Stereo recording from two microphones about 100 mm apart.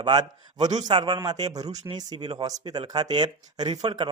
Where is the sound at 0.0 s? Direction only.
45° right (ahead or behind).